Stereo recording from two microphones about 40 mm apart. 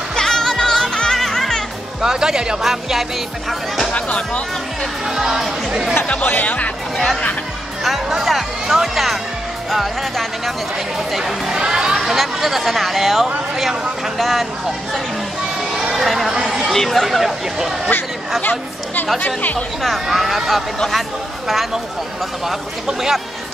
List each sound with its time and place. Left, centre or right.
0.1 s music: centre
2.0 s speech: centre
3.9 s speech: left
5.0 s speech: centre
6.2 s speech: left
7.8 s speech: centre
12.0 s speech: centre
15.8 s a sound: centre
16.1 s speech: centre
16.7 s speech: centre
18.4 s speech: left
19.8 s speech: centre
22.5 s speech: centre